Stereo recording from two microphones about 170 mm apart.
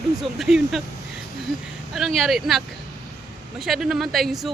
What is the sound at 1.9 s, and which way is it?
Speech, centre (ahead or behind).